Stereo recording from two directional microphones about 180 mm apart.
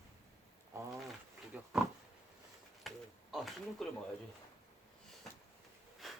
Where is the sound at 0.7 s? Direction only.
15° right (ahead or behind).